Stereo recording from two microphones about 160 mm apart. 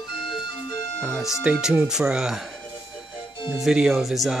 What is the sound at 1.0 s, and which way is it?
Speech, centre (ahead or behind).